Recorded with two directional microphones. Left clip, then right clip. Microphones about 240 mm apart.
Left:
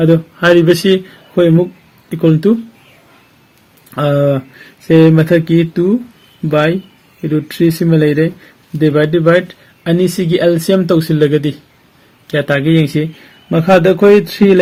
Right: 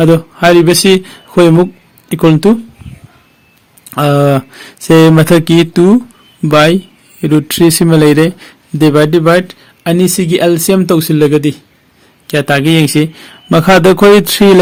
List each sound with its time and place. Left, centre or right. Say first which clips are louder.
0.0 s speech: right 3 dB; right
3.9 s speech: right 3 dB; right